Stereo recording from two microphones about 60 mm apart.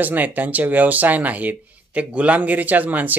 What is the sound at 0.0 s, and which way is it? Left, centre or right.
Speech, right.